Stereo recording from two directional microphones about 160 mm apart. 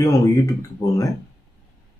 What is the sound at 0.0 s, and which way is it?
Speech, 20° left (ahead or behind).